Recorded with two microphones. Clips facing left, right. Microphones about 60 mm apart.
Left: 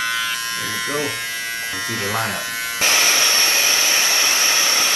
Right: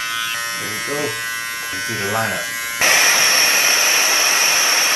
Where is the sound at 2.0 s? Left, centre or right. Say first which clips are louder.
Right 3 dB; right.